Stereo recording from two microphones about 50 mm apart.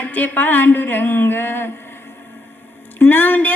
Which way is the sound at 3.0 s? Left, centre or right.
Left.